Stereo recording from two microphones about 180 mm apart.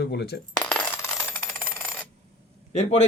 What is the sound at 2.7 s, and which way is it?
Speech, 35° left (ahead or behind).